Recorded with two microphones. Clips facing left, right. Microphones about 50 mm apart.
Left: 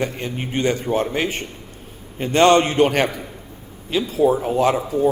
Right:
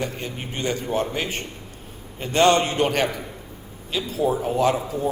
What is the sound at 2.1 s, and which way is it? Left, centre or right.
Speech, left.